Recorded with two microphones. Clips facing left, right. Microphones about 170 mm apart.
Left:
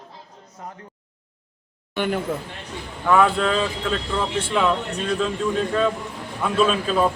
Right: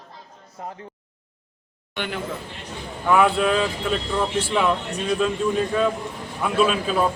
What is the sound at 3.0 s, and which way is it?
Speech, 10° right (ahead or behind).